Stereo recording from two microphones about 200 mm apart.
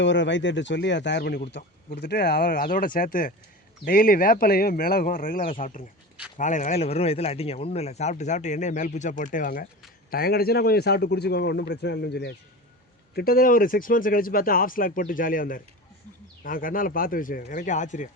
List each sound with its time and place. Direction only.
0.0 s speech: 65° left (ahead or behind); by 18.1 s 40° left (ahead or behind)